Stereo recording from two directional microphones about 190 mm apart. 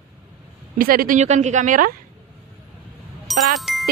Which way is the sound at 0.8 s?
50° right (ahead or behind).